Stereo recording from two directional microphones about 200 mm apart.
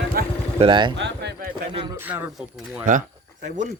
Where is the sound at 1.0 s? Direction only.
55° right (ahead or behind).